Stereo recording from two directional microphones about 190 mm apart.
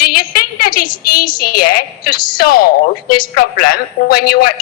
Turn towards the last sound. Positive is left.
turn(degrees=50)  # may be behind; listen again after turning